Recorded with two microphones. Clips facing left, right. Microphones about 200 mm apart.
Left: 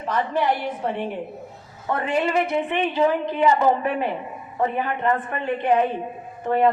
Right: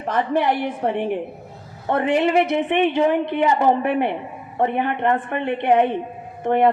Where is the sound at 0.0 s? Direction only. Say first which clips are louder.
Right 3 dB; 55° right (ahead or behind).